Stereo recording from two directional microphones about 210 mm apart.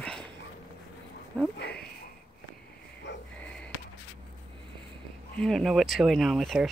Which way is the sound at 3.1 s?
55° left (ahead or behind).